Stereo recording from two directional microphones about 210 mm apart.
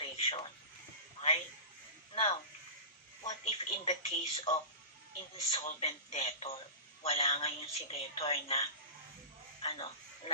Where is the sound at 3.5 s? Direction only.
25° left (ahead or behind).